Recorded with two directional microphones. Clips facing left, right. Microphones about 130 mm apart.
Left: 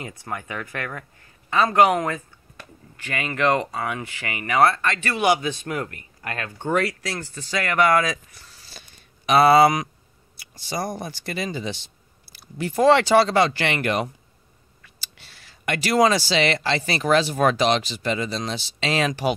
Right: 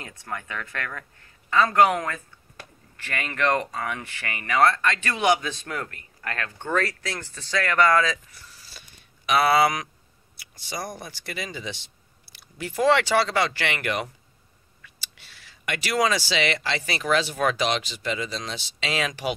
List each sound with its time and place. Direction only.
0.0 s speech: 15° left (ahead or behind)
3.2 s speech: 10° left (ahead or behind)
8.6 s a sound: 30° left (ahead or behind)
10.6 s speech: 30° left (ahead or behind)